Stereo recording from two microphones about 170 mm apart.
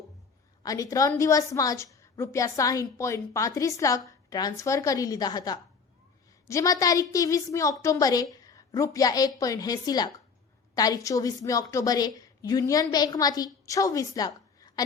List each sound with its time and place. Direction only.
0.6 s a woman's voice: 20° left (ahead or behind)